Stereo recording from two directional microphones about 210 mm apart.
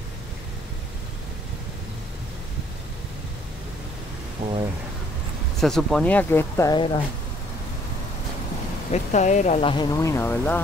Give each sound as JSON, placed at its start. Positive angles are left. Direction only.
{"t": 4.4, "sound": "a sound", "side_deg": -20}
{"t": 5.6, "sound": "speech", "side_deg": 0}
{"t": 8.9, "sound": "speech", "side_deg": 35}